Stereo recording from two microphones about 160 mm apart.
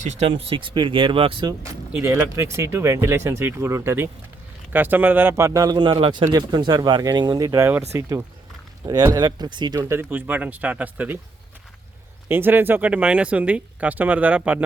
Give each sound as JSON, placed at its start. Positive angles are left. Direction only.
{"t": 0.0, "sound": "speech", "side_deg": -40}
{"t": 2.0, "sound": "speech", "side_deg": -15}
{"t": 8.9, "sound": "speech", "side_deg": -25}
{"t": 12.3, "sound": "speech", "side_deg": -15}